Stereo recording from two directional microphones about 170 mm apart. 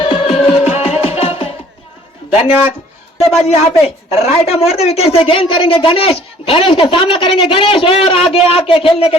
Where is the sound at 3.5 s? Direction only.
40° left (ahead or behind).